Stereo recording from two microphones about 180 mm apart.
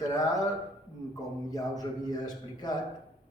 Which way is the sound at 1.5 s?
20° left (ahead or behind).